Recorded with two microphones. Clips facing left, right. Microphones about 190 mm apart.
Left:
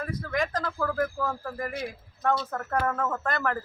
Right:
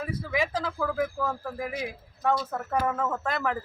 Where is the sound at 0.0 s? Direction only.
5° right (ahead or behind).